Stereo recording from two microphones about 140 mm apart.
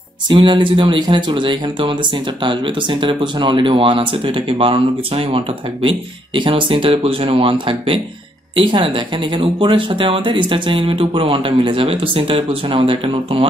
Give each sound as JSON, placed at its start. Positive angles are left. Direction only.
{"t": 0.3, "sound": "speech", "side_deg": -35}